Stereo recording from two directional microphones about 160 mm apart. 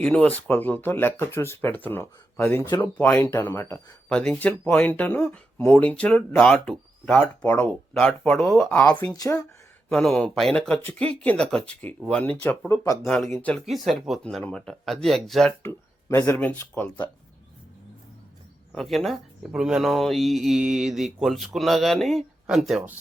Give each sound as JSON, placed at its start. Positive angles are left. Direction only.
{"t": 0.0, "sound": "speech", "side_deg": 10}
{"t": 9.0, "sound": "speech", "side_deg": 25}
{"t": 9.9, "sound": "speech", "side_deg": 5}
{"t": 13.3, "sound": "speech", "side_deg": 10}
{"t": 15.6, "sound": "speech", "side_deg": 15}
{"t": 18.7, "sound": "speech", "side_deg": 0}